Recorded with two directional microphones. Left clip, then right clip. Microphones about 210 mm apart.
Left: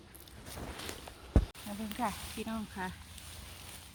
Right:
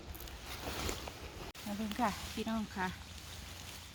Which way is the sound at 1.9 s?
20° left (ahead or behind).